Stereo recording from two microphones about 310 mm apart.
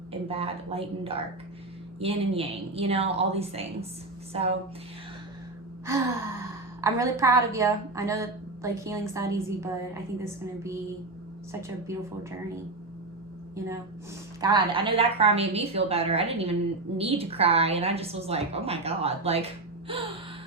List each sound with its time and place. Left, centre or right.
0.3 s a woman's voice: centre
5.8 s a woman's voice: centre
14.4 s a woman's voice: centre